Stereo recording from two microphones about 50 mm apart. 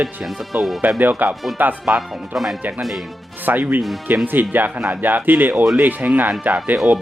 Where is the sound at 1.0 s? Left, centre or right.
Right.